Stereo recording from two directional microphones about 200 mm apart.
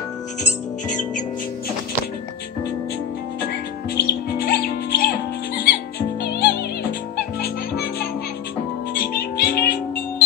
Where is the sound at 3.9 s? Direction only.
50° left (ahead or behind).